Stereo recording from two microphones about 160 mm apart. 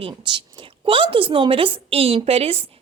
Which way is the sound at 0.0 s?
30° right (ahead or behind).